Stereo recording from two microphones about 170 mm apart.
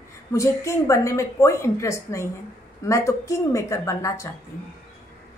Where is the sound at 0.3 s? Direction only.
15° left (ahead or behind).